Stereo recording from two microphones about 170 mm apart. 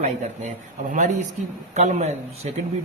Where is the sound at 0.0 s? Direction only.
45° right (ahead or behind).